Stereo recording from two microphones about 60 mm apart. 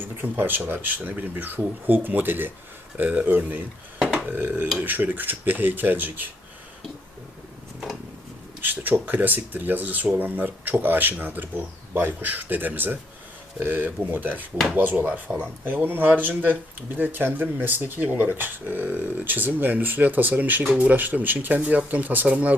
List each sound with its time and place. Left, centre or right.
0.2 s speech: right
8.6 s speech: right